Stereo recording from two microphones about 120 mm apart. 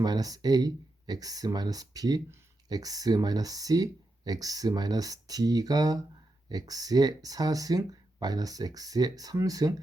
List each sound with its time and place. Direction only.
0.0 s speech: 35° right (ahead or behind)